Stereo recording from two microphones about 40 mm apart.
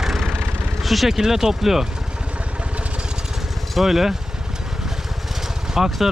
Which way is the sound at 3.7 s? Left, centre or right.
Centre.